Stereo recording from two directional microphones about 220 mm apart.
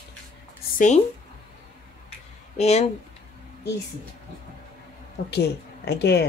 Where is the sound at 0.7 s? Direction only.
35° left (ahead or behind).